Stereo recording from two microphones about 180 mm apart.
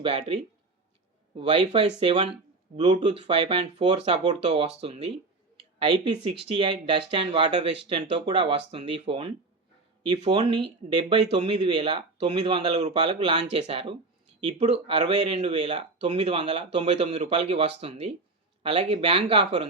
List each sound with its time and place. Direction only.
0.0 s speech: 30° right (ahead or behind)
1.4 s speech: 30° right (ahead or behind)